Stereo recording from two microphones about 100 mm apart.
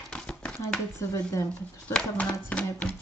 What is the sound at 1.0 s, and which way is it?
Speech, 30° left (ahead or behind).